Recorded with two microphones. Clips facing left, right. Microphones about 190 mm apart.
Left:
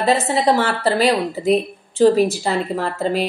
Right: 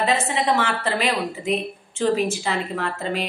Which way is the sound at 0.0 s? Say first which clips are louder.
Left 5 dB; 35° left (ahead or behind).